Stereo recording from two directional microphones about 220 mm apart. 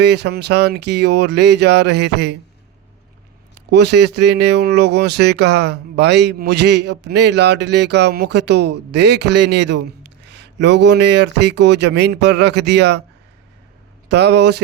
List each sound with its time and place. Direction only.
0.0 s speech: 50° right (ahead or behind)
3.7 s speech: 50° right (ahead or behind)
14.1 s speech: 50° right (ahead or behind)